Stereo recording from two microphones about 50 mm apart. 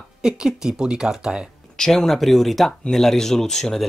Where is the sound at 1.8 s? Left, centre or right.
Centre.